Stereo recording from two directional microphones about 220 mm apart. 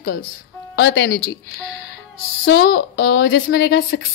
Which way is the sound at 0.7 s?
60° left (ahead or behind).